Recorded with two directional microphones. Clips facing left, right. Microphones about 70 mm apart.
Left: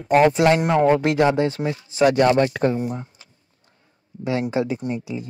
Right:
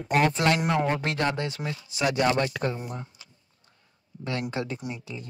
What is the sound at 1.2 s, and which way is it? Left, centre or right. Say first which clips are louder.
Speech: left 9 dB; centre.